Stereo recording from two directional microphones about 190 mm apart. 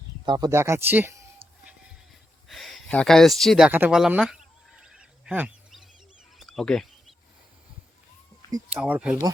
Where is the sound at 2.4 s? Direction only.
Centre (ahead or behind).